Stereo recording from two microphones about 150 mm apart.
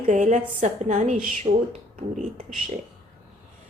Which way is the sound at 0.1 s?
50° right (ahead or behind).